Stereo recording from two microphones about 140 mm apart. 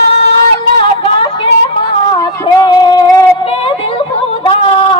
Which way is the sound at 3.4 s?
40° left (ahead or behind).